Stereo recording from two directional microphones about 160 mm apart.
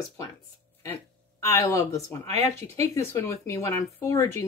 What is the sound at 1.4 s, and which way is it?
A woman's voice, 20° left (ahead or behind).